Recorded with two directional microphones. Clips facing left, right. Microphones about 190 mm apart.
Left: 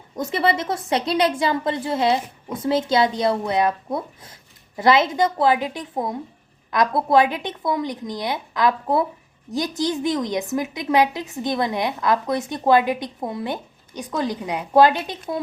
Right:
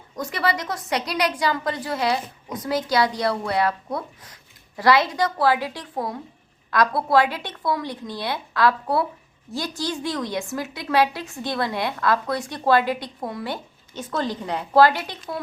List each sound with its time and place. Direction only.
0.2 s a woman's voice: 25° left (ahead or behind)